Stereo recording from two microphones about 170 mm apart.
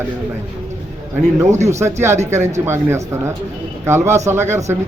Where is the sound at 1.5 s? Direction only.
40° right (ahead or behind).